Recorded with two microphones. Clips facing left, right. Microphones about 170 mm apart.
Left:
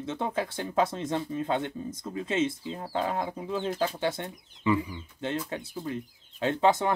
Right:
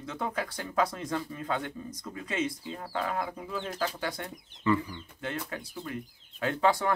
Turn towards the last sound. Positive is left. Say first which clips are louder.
# left 3 dB
turn(degrees=20)  # may be behind; listen again after turning